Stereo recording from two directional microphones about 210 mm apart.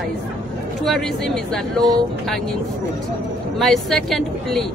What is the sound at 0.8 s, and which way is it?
Speech, centre (ahead or behind).